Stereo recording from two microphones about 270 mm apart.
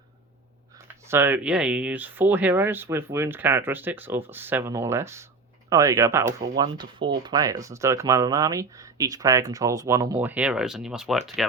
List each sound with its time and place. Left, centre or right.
1.0 s speech: centre